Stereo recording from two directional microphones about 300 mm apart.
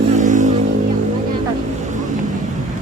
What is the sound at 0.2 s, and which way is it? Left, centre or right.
Music, right.